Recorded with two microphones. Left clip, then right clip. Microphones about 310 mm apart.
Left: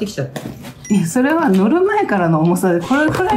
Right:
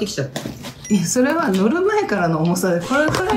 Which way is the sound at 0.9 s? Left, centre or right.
Left.